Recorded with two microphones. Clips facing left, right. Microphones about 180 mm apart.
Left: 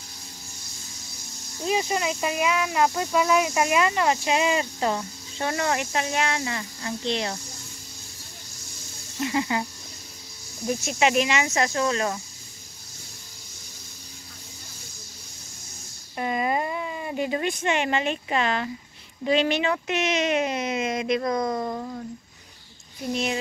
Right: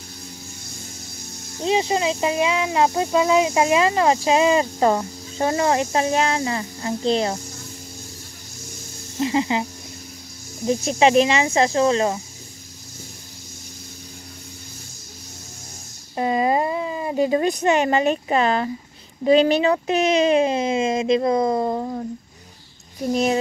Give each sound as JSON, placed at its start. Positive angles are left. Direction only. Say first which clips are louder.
{"t": 1.6, "sound": "speech", "louder": "right 5 dB", "side_deg": -25}
{"t": 5.5, "sound": "speech", "louder": "right 6 dB", "side_deg": -30}
{"t": 9.2, "sound": "speech", "louder": "right 5 dB", "side_deg": -25}
{"t": 10.7, "sound": "speech", "louder": "right 6 dB", "side_deg": -30}
{"t": 16.2, "sound": "speech", "louder": "right 6 dB", "side_deg": -30}